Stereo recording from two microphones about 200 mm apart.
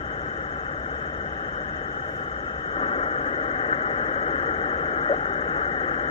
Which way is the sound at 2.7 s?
30° left (ahead or behind).